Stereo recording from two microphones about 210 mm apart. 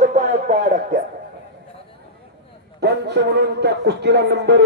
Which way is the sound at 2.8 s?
50° right (ahead or behind).